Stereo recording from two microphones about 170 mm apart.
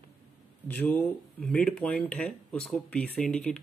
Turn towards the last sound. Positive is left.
turn(degrees=5)  # may be behind; listen again after turning